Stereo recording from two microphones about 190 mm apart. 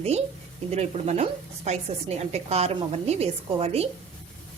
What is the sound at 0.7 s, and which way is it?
Speech, 35° right (ahead or behind).